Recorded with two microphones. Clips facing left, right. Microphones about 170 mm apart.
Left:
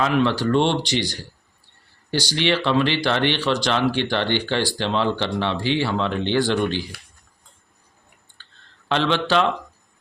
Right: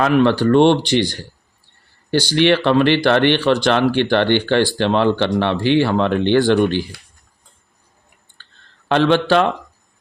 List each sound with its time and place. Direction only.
0.0 s speech: 55° right (ahead or behind)
8.4 s clicking: 50° right (ahead or behind)
8.9 s speech: 50° right (ahead or behind)